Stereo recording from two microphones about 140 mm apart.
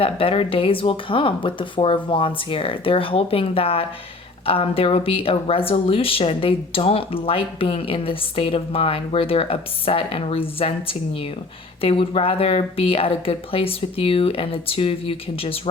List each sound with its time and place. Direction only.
0.0 s speech: 40° left (ahead or behind)